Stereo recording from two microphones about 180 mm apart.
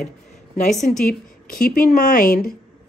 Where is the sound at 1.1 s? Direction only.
55° left (ahead or behind).